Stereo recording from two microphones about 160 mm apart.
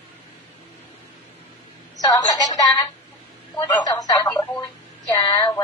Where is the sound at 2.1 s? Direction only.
25° left (ahead or behind).